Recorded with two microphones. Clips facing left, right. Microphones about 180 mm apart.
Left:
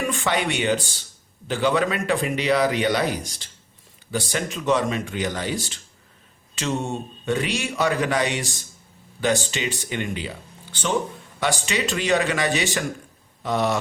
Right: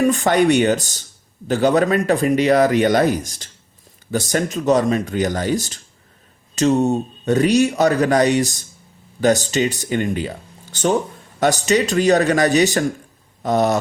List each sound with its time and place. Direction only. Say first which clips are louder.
0.0 s a man's voice: right 9 dB; 40° right (ahead or behind)